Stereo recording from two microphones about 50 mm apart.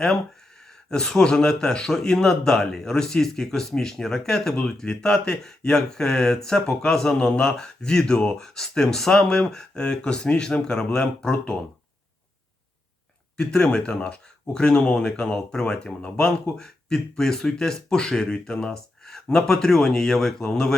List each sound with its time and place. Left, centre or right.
0.9 s speech: centre
13.3 s speech: centre